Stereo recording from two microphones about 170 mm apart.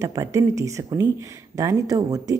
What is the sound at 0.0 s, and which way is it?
A woman's voice, 15° right (ahead or behind).